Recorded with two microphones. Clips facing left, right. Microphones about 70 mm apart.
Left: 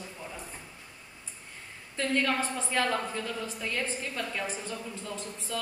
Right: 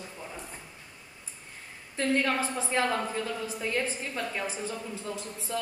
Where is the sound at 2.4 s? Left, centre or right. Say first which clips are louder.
Right 1 dB; centre.